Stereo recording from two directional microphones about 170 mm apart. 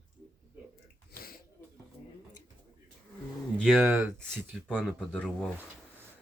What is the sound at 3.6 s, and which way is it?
Speech, centre (ahead or behind).